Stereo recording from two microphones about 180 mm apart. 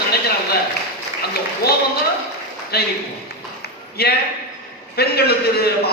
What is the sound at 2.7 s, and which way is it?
Speech, 60° left (ahead or behind).